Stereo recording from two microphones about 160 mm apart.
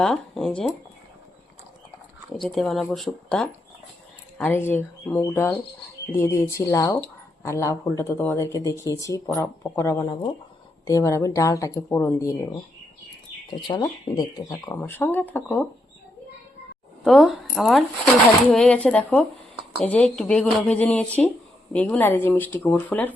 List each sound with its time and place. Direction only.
0.0 s speech: centre (ahead or behind)
2.4 s speech: centre (ahead or behind); by 12.5 s 20° left (ahead or behind)
13.6 s speech: 30° left (ahead or behind); by 15.6 s 10° left (ahead or behind)
17.0 s speech: centre (ahead or behind)